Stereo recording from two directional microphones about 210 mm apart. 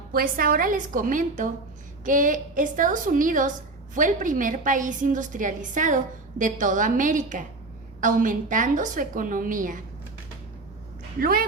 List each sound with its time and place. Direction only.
0.1 s a woman's voice: 45° right (ahead or behind)
11.2 s a woman's voice: 45° right (ahead or behind)